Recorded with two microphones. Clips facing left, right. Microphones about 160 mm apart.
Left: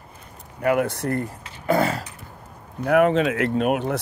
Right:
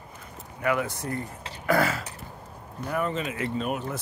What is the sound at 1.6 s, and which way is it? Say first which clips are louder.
Speech: left 3 dB; 25° left (ahead or behind).